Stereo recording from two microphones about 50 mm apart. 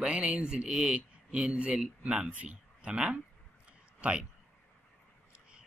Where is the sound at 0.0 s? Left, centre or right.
Right.